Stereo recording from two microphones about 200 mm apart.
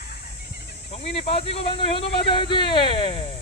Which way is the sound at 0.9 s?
30° left (ahead or behind).